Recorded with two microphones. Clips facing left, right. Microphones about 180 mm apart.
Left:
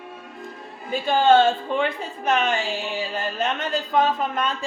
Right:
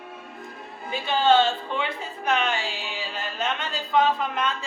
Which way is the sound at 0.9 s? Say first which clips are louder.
Left 3 dB; 50° left (ahead or behind).